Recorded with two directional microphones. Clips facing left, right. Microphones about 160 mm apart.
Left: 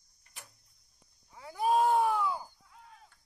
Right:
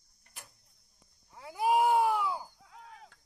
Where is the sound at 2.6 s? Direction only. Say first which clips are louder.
Right 4 dB; 85° right.